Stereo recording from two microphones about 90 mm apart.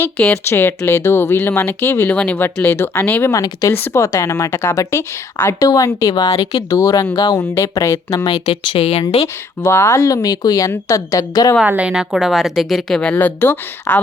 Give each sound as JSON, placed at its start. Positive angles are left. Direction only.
{"t": 0.4, "sound": "speech", "side_deg": 25}
{"t": 2.1, "sound": "speech", "side_deg": 15}
{"t": 3.3, "sound": "a woman's voice", "side_deg": 40}
{"t": 8.7, "sound": "speech", "side_deg": 90}
{"t": 9.2, "sound": "a woman's voice", "side_deg": 30}
{"t": 11.6, "sound": "a woman's voice", "side_deg": -15}
{"t": 13.1, "sound": "speech", "side_deg": 20}